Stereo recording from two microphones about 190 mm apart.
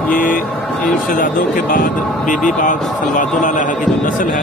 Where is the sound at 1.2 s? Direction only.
45° left (ahead or behind).